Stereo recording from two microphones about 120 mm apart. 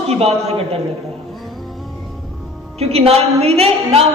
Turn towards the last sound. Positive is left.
turn(degrees=-60)  # may be behind; listen again after turning